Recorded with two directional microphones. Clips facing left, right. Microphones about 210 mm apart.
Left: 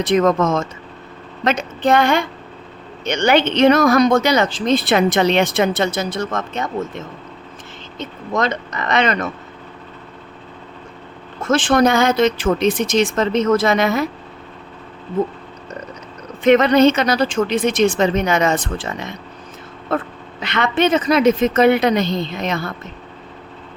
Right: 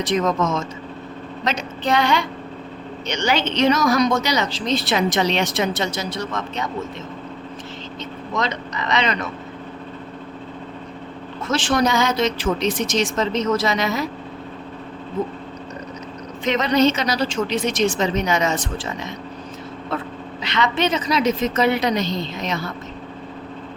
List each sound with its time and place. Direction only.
0.0 s speech: 55° left (ahead or behind)
11.4 s speech: 55° left (ahead or behind)
16.4 s speech: 55° left (ahead or behind)